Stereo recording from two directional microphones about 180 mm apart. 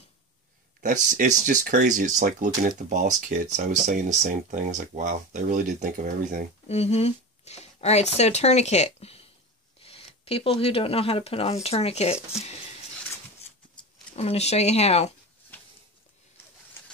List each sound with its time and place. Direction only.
0.7 s speech: 50° right (ahead or behind)
6.7 s speech: 35° left (ahead or behind)
14.1 s speech: 35° left (ahead or behind)
15.5 s a sound: 10° left (ahead or behind)